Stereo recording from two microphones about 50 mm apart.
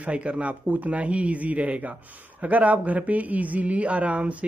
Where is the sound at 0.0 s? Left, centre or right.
Right.